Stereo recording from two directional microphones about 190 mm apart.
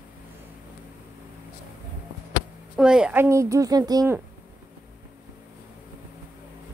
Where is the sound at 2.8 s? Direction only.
5° right (ahead or behind); by 4.2 s 20° right (ahead or behind).